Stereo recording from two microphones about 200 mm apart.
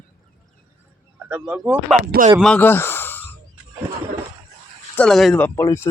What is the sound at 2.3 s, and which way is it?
Speech, 5° left (ahead or behind).